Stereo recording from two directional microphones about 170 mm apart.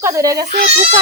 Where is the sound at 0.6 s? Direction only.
35° right (ahead or behind).